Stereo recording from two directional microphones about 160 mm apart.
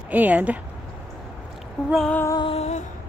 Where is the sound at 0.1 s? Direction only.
10° right (ahead or behind).